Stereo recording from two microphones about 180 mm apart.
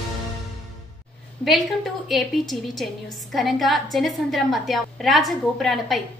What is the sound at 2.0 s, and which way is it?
A woman's voice, centre (ahead or behind).